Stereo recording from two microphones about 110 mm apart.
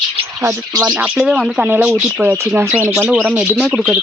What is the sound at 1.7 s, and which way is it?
Speech, 15° right (ahead or behind).